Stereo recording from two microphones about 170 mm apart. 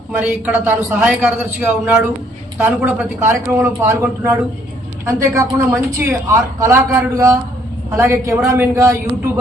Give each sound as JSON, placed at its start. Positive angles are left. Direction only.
{"t": 0.2, "sound": "a woman's voice", "side_deg": -10}